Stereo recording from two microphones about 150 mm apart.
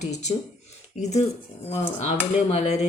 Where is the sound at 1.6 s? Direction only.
45° left (ahead or behind).